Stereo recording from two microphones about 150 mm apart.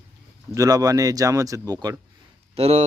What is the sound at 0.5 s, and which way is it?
Speech, 20° right (ahead or behind).